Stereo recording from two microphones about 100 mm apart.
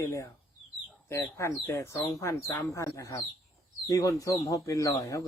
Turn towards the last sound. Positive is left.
turn(degrees=35)  # may be behind; listen again after turning